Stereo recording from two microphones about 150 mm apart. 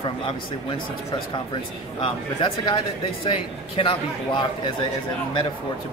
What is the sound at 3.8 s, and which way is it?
Speech, 35° left (ahead or behind).